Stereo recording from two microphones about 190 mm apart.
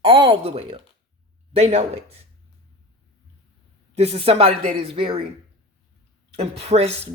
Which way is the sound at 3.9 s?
35° right (ahead or behind).